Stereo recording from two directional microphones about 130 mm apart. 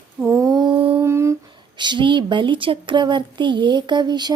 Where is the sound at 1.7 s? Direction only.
35° right (ahead or behind).